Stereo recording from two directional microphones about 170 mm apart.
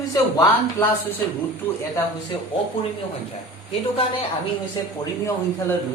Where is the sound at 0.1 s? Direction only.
20° left (ahead or behind).